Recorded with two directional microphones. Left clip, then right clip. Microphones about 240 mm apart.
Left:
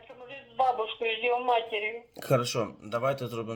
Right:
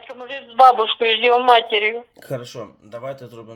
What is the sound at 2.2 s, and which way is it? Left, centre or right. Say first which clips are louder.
Speech: left 2 dB; centre.